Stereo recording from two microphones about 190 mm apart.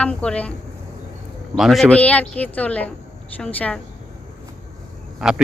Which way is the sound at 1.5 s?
Centre (ahead or behind).